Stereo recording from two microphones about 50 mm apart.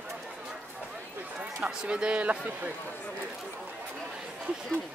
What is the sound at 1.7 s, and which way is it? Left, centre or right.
Speech, centre.